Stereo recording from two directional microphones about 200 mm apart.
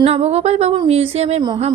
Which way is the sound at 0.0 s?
30° right (ahead or behind).